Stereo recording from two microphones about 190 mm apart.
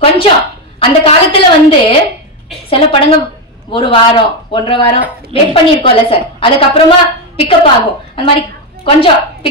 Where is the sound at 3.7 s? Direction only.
25° left (ahead or behind).